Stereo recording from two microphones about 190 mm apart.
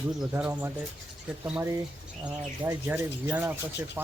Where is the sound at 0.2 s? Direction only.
5° right (ahead or behind).